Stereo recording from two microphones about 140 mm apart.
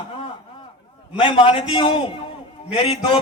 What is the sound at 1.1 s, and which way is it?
A man's voice, 35° left (ahead or behind).